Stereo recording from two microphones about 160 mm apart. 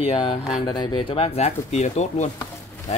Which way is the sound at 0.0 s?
35° left (ahead or behind).